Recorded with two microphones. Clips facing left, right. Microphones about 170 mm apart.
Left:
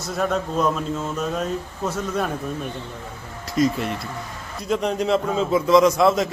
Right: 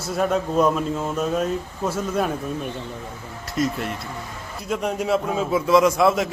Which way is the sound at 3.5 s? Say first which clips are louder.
Left 3 dB; centre (ahead or behind).